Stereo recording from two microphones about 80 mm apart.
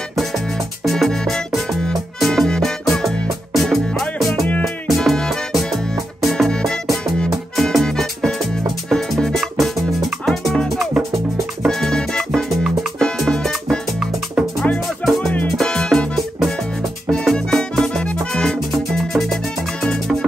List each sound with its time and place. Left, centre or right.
0.8 s music: centre
15.0 s music: centre
17.1 s music: centre